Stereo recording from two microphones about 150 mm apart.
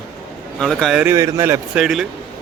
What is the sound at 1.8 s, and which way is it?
Speech, 5° right (ahead or behind).